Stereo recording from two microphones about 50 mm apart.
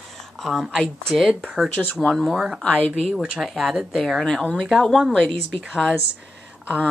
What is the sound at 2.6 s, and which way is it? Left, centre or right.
Speech, left.